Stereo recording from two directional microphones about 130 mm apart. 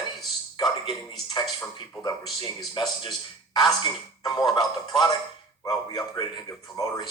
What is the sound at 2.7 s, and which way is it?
A man's voice, 35° left (ahead or behind).